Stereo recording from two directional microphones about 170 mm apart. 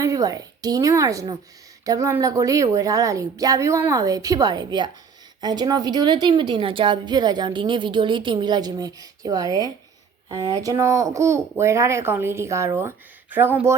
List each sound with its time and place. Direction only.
0.0 s a woman's voice: 20° right (ahead or behind)